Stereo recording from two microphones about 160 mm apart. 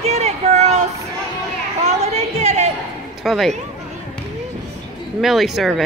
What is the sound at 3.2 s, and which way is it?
Speech, centre (ahead or behind).